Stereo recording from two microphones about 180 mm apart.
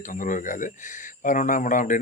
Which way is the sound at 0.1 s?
45° left (ahead or behind).